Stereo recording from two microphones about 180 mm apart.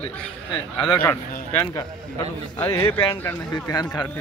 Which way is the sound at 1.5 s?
15° left (ahead or behind).